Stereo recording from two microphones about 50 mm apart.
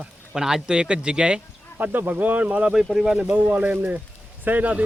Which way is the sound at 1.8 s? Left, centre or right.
Right.